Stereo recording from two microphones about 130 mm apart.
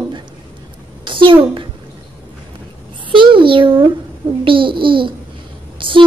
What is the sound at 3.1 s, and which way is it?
Speech, 40° right (ahead or behind).